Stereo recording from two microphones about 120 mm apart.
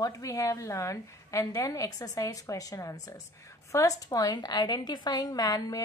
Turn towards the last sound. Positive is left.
turn(degrees=30)  # may be behind; listen again after turning